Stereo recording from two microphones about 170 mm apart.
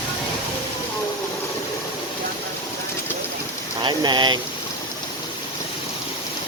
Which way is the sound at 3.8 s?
25° right (ahead or behind).